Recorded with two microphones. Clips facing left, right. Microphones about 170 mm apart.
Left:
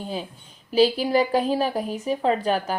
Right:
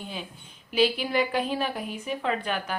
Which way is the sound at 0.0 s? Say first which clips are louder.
Left 6 dB; 35° left (ahead or behind).